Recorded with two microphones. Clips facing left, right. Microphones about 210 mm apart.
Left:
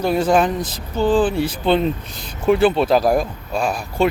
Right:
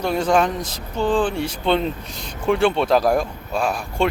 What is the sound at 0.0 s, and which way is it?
Speech, 5° left (ahead or behind).